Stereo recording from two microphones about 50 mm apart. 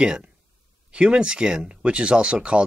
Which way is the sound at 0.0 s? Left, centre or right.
Centre.